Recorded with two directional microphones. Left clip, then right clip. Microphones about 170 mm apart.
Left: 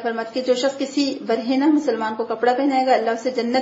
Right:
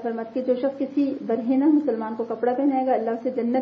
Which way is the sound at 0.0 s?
25° left (ahead or behind).